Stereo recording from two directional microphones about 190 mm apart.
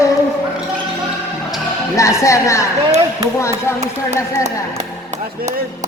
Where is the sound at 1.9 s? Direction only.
15° left (ahead or behind).